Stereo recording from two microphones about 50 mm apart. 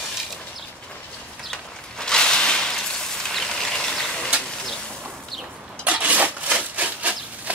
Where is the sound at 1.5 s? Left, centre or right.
Centre.